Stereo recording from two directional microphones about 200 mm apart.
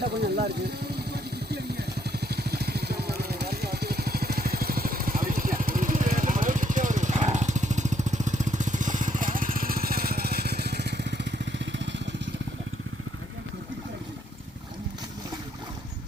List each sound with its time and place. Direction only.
0.0 s speech: 55° right (ahead or behind)
1.1 s vehicle: 55° right (ahead or behind)